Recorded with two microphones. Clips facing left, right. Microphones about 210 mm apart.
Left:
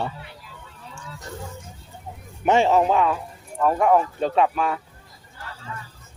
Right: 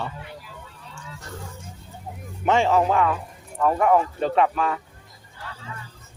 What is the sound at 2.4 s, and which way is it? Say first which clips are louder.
Speech: left 2 dB; 20° left (ahead or behind).